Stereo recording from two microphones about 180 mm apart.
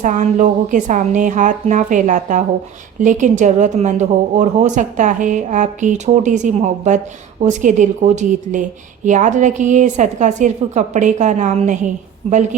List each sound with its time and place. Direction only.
0.0 s a woman's voice: 45° right (ahead or behind)